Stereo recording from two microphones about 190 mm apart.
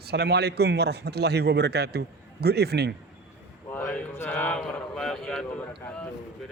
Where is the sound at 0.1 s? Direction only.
60° right (ahead or behind).